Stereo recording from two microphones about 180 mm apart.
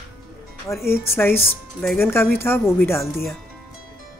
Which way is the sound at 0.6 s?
15° left (ahead or behind).